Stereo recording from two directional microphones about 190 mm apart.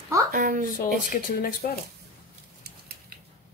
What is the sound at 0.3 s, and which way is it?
Speech, 40° right (ahead or behind).